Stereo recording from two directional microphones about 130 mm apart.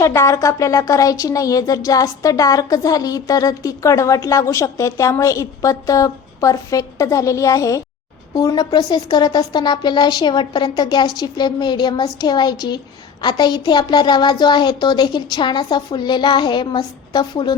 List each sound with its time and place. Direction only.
0.0 s a woman's voice: 20° left (ahead or behind)